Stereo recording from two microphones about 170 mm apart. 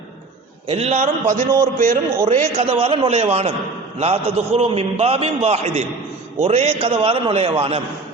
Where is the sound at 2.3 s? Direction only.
35° right (ahead or behind).